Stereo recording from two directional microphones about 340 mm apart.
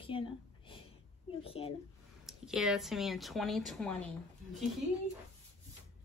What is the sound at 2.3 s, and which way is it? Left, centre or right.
Speech, centre.